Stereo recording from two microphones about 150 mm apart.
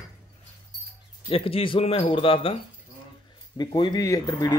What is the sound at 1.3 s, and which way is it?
Speech, 40° left (ahead or behind).